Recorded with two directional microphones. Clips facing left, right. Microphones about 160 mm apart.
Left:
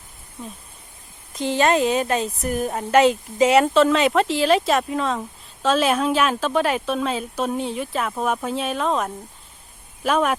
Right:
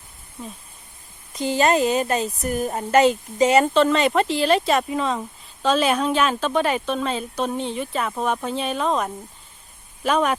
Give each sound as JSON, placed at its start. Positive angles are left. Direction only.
{"t": 0.4, "sound": "speech", "side_deg": 0}